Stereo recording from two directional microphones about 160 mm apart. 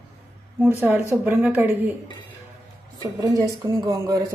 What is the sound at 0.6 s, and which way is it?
Speech, 10° right (ahead or behind).